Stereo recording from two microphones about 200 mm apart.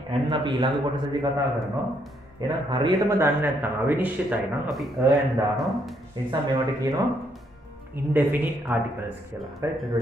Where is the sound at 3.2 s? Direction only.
10° right (ahead or behind).